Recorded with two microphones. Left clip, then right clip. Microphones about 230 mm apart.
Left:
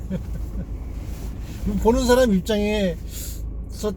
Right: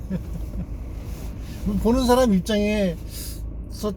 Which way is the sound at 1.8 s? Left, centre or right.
Centre.